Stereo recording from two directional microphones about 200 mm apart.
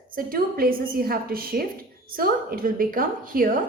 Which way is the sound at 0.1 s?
45° right (ahead or behind).